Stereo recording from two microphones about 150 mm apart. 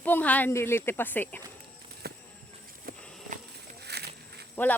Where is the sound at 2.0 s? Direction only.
90° right.